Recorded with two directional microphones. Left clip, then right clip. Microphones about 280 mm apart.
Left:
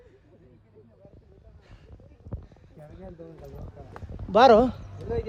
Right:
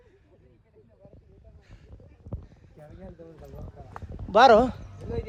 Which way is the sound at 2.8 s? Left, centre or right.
Centre.